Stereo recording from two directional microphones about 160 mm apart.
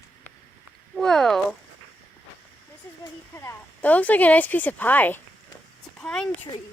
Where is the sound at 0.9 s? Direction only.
Centre (ahead or behind).